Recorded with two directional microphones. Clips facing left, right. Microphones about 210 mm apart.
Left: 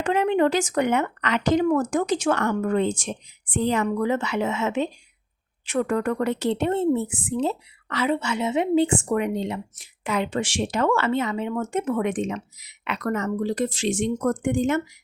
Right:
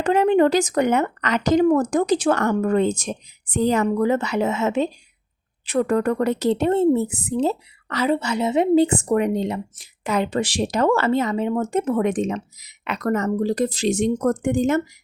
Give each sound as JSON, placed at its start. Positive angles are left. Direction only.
{"t": 0.0, "sound": "a woman's voice", "side_deg": -40}